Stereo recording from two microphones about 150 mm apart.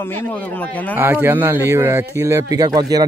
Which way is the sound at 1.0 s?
15° right (ahead or behind).